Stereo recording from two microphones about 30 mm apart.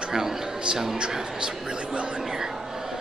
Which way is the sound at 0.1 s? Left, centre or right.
Centre.